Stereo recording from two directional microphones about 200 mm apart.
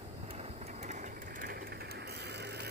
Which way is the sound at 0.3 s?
30° right (ahead or behind).